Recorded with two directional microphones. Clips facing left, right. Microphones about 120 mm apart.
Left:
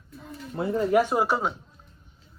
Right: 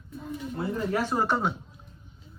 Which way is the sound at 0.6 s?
15° left (ahead or behind).